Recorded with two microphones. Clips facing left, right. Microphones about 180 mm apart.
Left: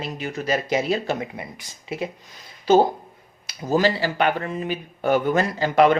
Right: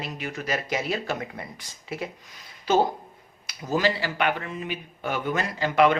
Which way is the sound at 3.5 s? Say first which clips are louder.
Left 4 dB; 35° left (ahead or behind).